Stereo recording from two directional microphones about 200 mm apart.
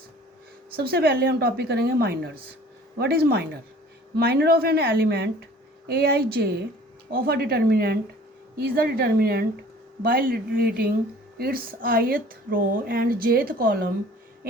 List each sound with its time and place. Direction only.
0.8 s speech: 50° right (ahead or behind)